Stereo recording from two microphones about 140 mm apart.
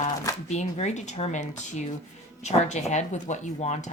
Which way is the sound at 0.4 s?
55° left (ahead or behind).